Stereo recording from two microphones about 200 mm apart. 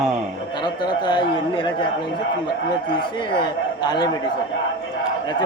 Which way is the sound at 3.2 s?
25° left (ahead or behind).